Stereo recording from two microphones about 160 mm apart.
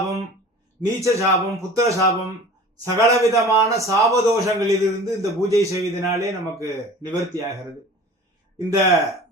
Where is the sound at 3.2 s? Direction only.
20° right (ahead or behind).